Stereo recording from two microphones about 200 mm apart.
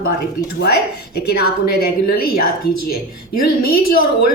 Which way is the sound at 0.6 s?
55° left (ahead or behind).